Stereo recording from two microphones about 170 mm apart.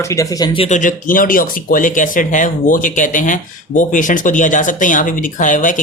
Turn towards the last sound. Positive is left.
turn(degrees=50)  # may be behind; listen again after turning